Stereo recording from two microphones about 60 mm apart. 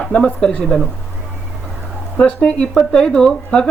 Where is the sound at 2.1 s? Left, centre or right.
Centre.